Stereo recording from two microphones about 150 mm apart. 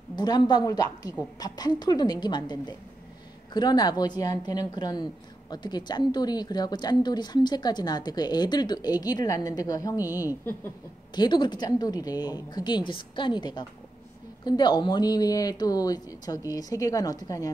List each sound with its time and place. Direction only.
0.1 s a woman's voice: 30° left (ahead or behind)
10.0 s a woman's voice: 15° right (ahead or behind)
11.1 s a woman's voice: 30° left (ahead or behind)